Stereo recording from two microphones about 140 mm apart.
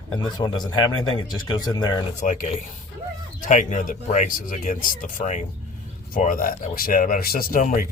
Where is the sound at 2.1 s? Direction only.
60° left (ahead or behind).